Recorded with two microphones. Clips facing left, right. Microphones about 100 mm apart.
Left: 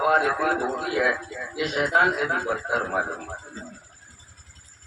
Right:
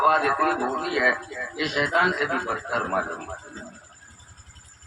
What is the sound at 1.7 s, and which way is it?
Speech, 90° right.